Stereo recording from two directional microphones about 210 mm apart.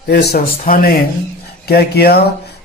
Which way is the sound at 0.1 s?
50° left (ahead or behind).